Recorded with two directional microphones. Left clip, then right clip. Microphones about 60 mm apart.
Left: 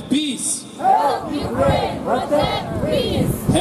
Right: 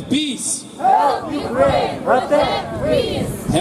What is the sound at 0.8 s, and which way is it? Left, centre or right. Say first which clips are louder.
Battle cry: right 2 dB; centre.